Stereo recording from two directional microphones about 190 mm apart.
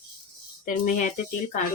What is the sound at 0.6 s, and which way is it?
Speech, 45° left (ahead or behind).